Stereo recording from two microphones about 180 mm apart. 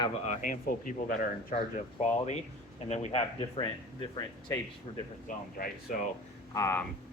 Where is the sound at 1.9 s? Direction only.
35° left (ahead or behind).